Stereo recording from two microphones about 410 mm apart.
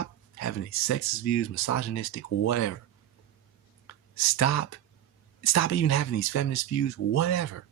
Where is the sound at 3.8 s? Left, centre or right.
Left.